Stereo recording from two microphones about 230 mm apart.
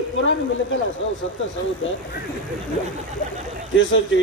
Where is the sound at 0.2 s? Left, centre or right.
Left.